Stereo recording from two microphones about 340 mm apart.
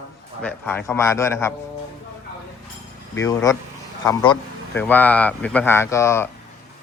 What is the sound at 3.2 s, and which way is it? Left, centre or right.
A man's voice, centre.